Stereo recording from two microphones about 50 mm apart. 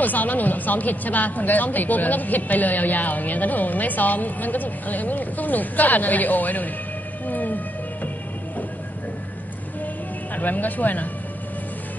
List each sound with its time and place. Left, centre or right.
0.0 s speech: left
7.2 s music: left
10.3 s speech: left